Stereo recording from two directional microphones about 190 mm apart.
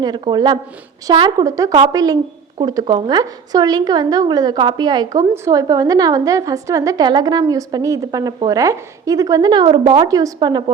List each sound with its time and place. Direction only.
0.0 s speech: 20° right (ahead or behind)